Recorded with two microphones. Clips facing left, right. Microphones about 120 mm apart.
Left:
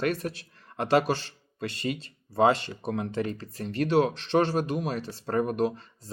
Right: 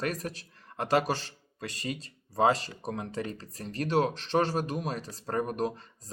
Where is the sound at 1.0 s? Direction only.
40° right (ahead or behind).